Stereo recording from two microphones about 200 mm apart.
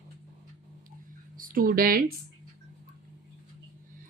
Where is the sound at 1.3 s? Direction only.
45° right (ahead or behind).